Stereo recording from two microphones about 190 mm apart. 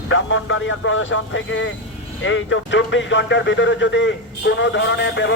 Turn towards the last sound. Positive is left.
turn(degrees=70)  # may be behind; listen again after turning